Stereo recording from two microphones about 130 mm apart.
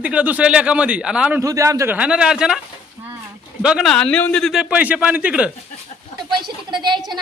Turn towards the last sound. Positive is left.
turn(degrees=-35)  # may be behind; listen again after turning